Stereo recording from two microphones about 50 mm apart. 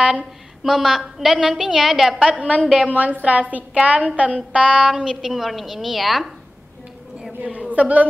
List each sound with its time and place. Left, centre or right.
0.1 s a woman's voice: centre
2.1 s a woman's voice: right
4.8 s a woman's voice: centre
7.4 s a woman's voice: right